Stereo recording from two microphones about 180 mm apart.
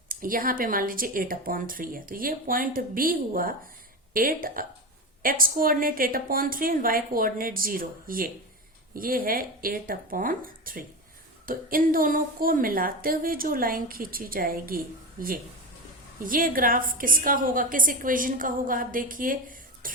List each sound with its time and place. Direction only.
0.1 s a woman's voice: 50° right (ahead or behind)
16.2 s a woman's voice: 50° right (ahead or behind)